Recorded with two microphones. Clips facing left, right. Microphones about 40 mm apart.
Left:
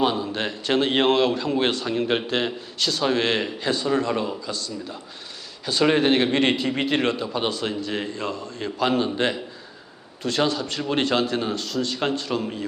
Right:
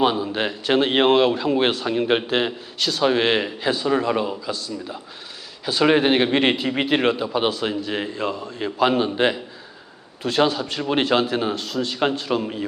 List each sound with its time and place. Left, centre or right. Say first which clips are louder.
0.0 s a man's voice: right 3 dB; centre